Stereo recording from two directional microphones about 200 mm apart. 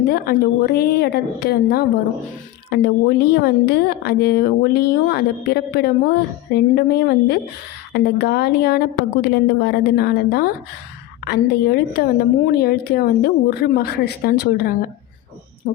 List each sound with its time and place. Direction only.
0.1 s a woman's voice: 50° left (ahead or behind)
15.6 s speech: 40° left (ahead or behind)